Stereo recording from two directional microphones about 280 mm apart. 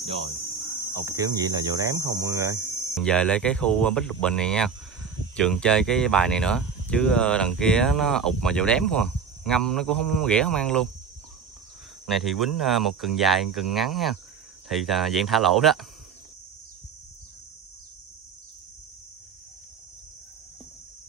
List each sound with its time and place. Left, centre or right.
0.0 s speech: centre
1.0 s hum: centre
2.6 s speech: centre
12.1 s speech: centre